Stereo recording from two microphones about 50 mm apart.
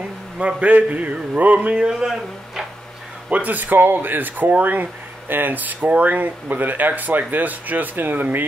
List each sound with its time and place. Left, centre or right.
0.4 s speech: right
1.8 s speech: centre
3.3 s speech: right